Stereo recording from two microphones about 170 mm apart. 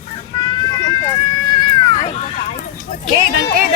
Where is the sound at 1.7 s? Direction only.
25° left (ahead or behind).